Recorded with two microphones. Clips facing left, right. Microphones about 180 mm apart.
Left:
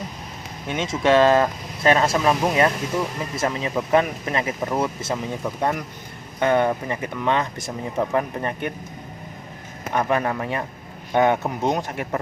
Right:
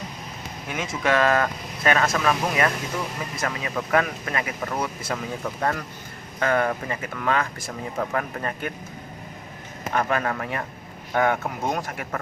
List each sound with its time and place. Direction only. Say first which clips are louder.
0.7 s speech: left 5 dB; 25° left (ahead or behind)
9.9 s speech: left 3 dB; 20° left (ahead or behind)